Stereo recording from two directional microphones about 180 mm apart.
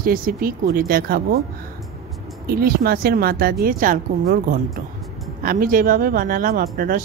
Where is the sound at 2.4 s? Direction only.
55° right (ahead or behind).